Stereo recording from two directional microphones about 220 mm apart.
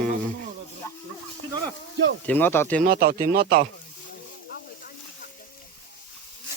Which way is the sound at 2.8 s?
40° right (ahead or behind).